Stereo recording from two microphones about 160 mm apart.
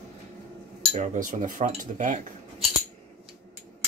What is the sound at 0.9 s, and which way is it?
Cutlery, 50° right (ahead or behind).